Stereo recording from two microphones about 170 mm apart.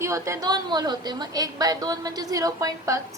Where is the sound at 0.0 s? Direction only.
15° right (ahead or behind).